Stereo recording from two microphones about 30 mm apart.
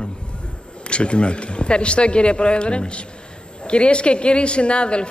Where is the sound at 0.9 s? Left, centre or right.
Left.